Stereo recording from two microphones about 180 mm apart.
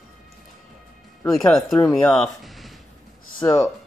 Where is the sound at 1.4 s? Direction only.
Centre (ahead or behind).